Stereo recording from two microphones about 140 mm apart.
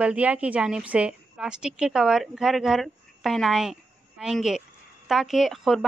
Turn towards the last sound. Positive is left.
turn(degrees=0)  # may be behind; listen again after turning